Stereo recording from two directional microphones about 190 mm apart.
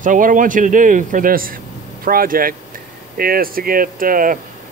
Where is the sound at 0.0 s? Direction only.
45° right (ahead or behind).